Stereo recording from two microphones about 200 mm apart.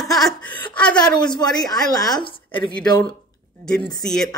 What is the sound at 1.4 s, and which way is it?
A woman's voice, 20° left (ahead or behind).